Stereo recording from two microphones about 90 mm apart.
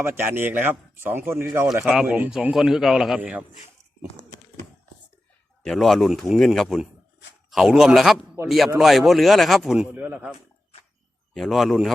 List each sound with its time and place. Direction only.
0.0 s speech: 25° right (ahead or behind)
1.7 s a man's voice: 5° right (ahead or behind)
3.2 s a man's voice: 15° right (ahead or behind)
5.6 s a man's voice: centre (ahead or behind)
9.9 s speech: 25° right (ahead or behind)
11.3 s a man's voice: centre (ahead or behind)